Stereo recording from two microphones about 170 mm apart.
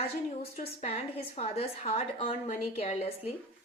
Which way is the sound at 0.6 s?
40° left (ahead or behind).